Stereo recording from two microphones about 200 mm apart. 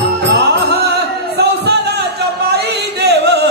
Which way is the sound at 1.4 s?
55° right (ahead or behind).